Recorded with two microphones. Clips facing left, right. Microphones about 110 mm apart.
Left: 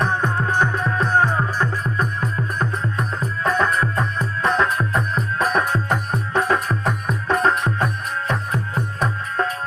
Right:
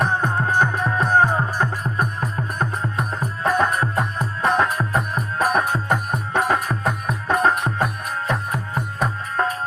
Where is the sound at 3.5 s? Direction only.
15° right (ahead or behind).